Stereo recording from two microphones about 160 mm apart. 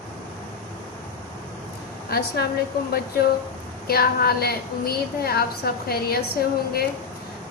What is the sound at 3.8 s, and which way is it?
A woman's voice, 75° left (ahead or behind).